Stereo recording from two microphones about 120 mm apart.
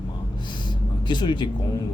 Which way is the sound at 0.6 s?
40° left (ahead or behind).